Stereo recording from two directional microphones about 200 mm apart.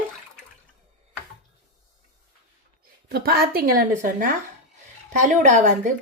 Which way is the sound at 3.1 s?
50° right (ahead or behind).